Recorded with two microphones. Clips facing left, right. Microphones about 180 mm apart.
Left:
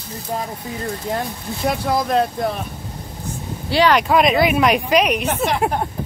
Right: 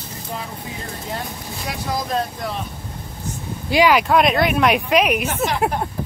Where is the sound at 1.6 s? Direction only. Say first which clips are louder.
Left 6 dB; 60° left (ahead or behind).